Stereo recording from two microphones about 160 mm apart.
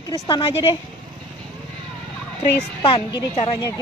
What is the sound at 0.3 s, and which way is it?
Speech, 35° left (ahead or behind).